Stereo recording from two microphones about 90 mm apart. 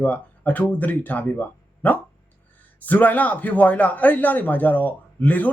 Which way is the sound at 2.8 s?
20° left (ahead or behind).